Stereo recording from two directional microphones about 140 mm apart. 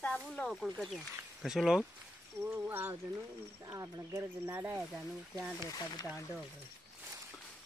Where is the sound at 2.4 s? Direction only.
15° right (ahead or behind).